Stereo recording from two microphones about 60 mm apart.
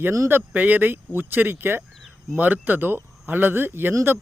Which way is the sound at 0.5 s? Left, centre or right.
Right.